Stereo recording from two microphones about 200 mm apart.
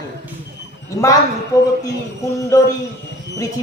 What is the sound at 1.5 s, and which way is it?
Speech, 15° left (ahead or behind).